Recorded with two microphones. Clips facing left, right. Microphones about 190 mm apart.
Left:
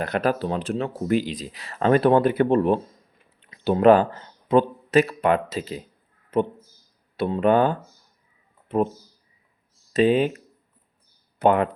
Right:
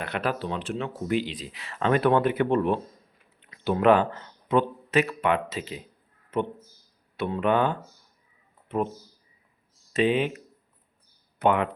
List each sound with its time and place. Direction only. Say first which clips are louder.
0.0 s speech: left 6 dB; 40° left (ahead or behind)
9.9 s speech: left 5 dB; 40° left (ahead or behind)